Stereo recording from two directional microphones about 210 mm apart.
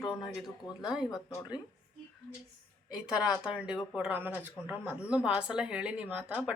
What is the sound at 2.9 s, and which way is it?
A woman's voice, 5° right (ahead or behind).